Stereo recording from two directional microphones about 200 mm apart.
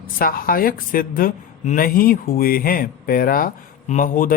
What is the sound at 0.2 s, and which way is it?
Speech, 45° left (ahead or behind).